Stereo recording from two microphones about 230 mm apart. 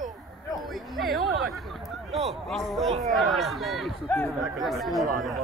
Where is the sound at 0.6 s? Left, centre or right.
Centre.